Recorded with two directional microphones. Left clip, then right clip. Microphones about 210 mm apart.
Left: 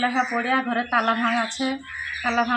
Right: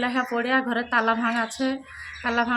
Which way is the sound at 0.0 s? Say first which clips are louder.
Left 2 dB; 25° right (ahead or behind).